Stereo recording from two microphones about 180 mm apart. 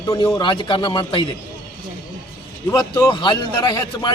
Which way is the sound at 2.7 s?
20° left (ahead or behind).